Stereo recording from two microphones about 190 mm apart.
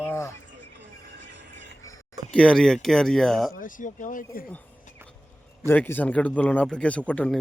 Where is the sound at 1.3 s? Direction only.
70° right (ahead or behind).